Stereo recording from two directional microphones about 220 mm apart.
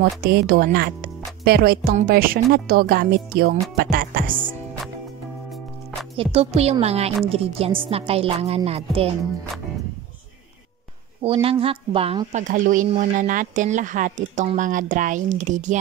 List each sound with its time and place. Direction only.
0.2 s a woman's voice: 45° right (ahead or behind)
6.1 s a woman's voice: 25° right (ahead or behind)
11.2 s a woman's voice: 25° right (ahead or behind)